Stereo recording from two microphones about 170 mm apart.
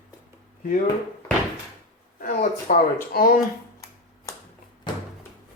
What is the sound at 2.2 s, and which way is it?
Speech, 55° left (ahead or behind).